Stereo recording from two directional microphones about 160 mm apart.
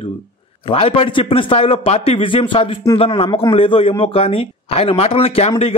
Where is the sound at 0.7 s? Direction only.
35° left (ahead or behind).